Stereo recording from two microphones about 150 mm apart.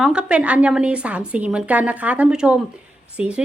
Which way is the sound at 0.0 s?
5° right (ahead or behind).